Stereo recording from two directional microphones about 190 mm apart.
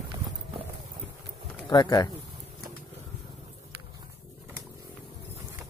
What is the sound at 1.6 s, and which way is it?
Speech, 20° left (ahead or behind).